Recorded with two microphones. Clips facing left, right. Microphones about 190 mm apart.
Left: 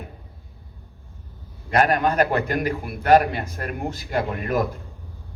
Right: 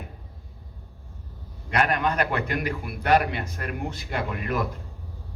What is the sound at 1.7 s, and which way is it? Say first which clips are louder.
A man's voice: left 5 dB; 45° left (ahead or behind).